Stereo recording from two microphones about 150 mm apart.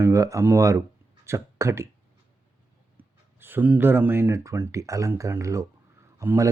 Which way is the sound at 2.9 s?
15° right (ahead or behind).